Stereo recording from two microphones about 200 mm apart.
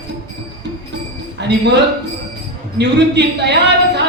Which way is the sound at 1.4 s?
60° right (ahead or behind).